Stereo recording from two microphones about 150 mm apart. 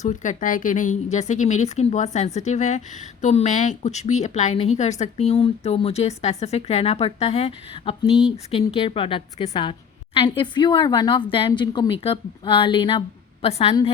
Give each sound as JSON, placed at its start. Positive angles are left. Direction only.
{"t": 0.0, "sound": "speech", "side_deg": 55}